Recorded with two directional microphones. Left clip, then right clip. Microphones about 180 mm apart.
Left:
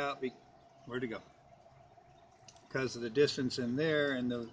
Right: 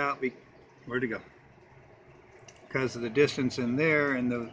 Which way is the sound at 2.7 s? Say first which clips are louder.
Right 6 dB; 5° right (ahead or behind).